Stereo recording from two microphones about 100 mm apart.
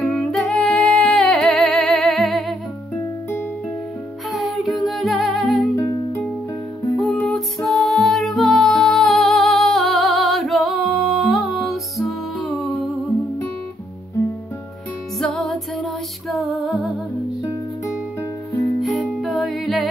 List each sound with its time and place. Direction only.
0.0 s music: 5° left (ahead or behind)
4.3 s music: centre (ahead or behind)
5.8 s music: 35° left (ahead or behind)
7.0 s music: 5° left (ahead or behind)
15.1 s music: 5° left (ahead or behind)
17.4 s music: 35° left (ahead or behind)
18.8 s music: centre (ahead or behind)